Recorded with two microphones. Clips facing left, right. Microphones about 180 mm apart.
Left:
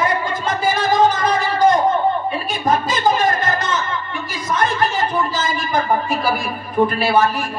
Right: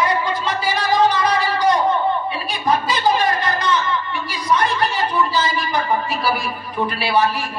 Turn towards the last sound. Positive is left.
turn(degrees=50)  # may be behind; listen again after turning